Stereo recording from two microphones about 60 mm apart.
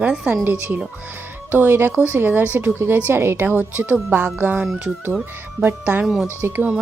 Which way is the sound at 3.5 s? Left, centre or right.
Right.